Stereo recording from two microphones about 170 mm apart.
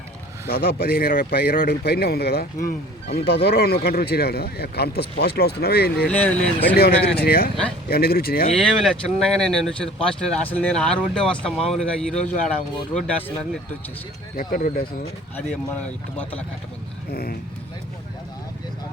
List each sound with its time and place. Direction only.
0.4 s speech: 60° left (ahead or behind)
6.1 s speech: 10° left (ahead or behind)
7.0 s speech: 35° left (ahead or behind)
7.3 s speech: 65° left (ahead or behind)
8.5 s speech: centre (ahead or behind)
12.2 s a man's voice: 45° left (ahead or behind)
12.5 s speech: 5° left (ahead or behind)
14.3 s speech: 60° left (ahead or behind)
17.1 s speech: 60° left (ahead or behind)